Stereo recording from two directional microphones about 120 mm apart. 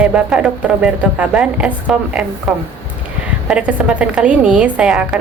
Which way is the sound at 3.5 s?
10° right (ahead or behind).